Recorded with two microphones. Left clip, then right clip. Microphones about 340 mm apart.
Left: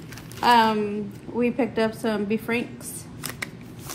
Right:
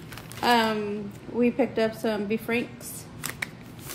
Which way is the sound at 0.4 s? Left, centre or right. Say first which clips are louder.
Left 5 dB; centre.